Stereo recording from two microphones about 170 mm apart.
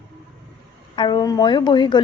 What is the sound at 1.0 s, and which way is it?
Speech, 25° left (ahead or behind).